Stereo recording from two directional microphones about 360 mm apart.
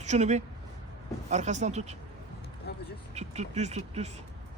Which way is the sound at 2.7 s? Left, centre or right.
Left.